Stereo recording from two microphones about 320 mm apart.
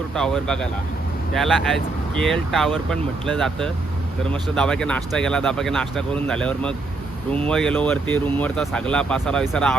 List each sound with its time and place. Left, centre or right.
0.1 s speech: centre